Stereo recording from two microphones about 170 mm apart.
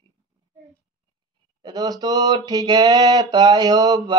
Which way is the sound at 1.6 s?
20° right (ahead or behind).